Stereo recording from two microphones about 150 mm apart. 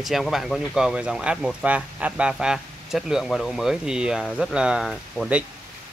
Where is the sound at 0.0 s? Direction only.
Centre (ahead or behind).